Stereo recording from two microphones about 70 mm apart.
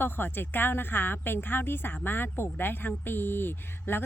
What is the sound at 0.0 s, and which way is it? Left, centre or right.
A woman's voice, left.